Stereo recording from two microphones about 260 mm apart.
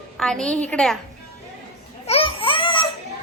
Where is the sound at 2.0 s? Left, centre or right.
Left.